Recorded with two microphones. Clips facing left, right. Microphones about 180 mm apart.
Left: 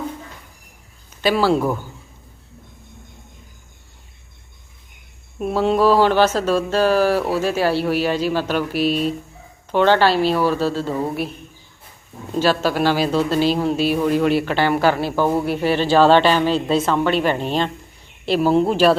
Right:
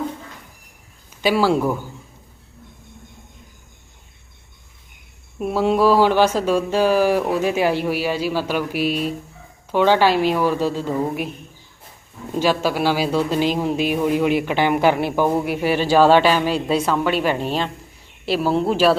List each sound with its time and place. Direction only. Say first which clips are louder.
1.2 s speech: even; 10° right (ahead or behind)
5.4 s speech: even; 10° right (ahead or behind)
12.3 s speech: left 1 dB; 10° right (ahead or behind)